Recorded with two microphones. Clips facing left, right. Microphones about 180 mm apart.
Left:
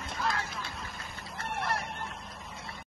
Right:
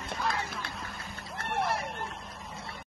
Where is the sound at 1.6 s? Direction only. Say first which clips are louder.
Right 3 dB; centre (ahead or behind).